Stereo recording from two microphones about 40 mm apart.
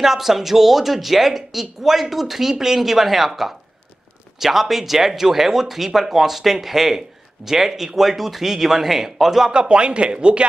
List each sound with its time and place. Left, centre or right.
0.0 s speech: centre
9.5 s speech: right